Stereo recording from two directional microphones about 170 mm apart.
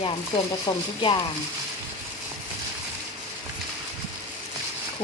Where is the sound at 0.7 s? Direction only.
20° left (ahead or behind).